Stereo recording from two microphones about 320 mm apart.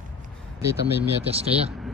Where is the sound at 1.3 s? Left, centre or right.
Centre.